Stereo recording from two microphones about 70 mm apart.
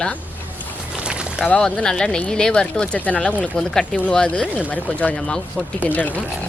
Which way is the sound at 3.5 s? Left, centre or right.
Centre.